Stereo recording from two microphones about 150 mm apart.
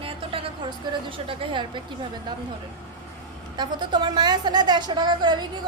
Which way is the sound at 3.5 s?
30° right (ahead or behind).